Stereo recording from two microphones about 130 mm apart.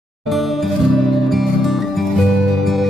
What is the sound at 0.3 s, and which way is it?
Music, centre (ahead or behind).